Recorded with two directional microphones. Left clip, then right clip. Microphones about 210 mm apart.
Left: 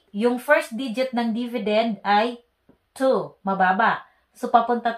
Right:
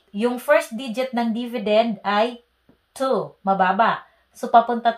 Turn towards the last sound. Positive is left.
turn(degrees=-45)  # may be behind; listen again after turning